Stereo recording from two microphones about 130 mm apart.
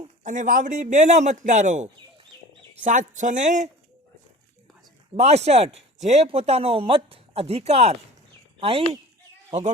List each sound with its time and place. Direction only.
0.3 s a man's voice: 85° right; by 1.9 s 70° right (ahead or behind)
2.8 s a man's voice: 80° right
5.1 s speech: 55° right (ahead or behind)